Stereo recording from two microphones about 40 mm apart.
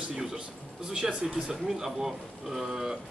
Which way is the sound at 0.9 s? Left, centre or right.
Right.